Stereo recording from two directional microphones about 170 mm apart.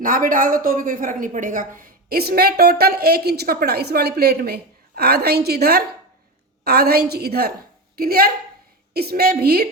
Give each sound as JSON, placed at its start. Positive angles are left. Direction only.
{"t": 0.0, "sound": "a woman's voice", "side_deg": -55}